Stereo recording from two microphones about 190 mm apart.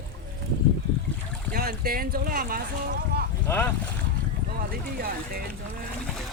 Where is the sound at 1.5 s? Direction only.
50° right (ahead or behind).